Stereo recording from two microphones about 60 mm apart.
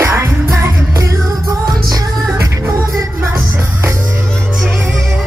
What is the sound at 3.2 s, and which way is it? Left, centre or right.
Music, right.